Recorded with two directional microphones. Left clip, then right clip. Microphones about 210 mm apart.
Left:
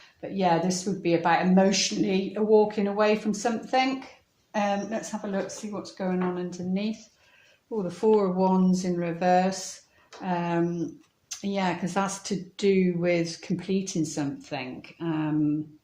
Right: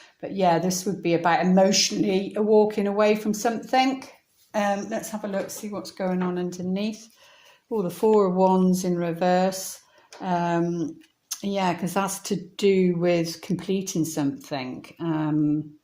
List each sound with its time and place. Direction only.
0.2 s speech: 40° right (ahead or behind)
8.2 s speech: 40° right (ahead or behind)